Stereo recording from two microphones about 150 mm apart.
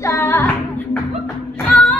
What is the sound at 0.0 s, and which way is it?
Female singing, 15° left (ahead or behind).